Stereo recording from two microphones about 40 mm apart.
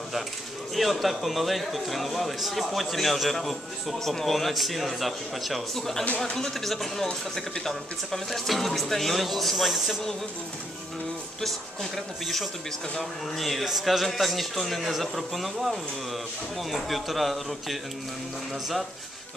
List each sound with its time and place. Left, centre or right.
0.7 s a man's voice: centre
11.4 s a man's voice: centre